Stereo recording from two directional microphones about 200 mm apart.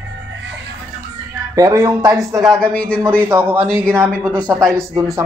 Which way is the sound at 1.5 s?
15° right (ahead or behind).